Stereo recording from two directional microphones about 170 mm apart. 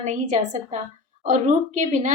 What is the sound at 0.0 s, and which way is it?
A woman's voice, 45° right (ahead or behind).